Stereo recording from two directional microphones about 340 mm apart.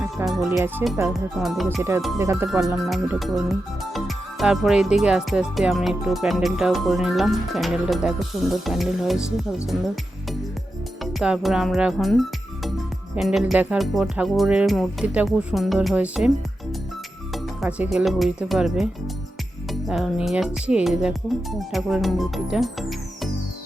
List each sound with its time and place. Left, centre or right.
0.0 s speech: centre
11.0 s speech: centre
17.3 s speech: centre